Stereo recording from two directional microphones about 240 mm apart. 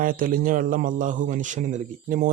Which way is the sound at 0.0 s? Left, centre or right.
Right.